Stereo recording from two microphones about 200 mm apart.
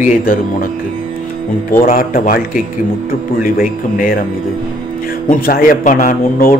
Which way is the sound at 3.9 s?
45° left (ahead or behind).